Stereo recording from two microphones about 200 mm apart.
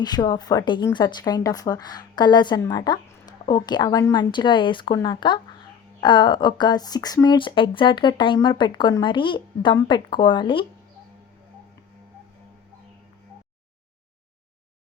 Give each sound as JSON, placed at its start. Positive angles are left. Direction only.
{"t": 0.0, "sound": "speech", "side_deg": 20}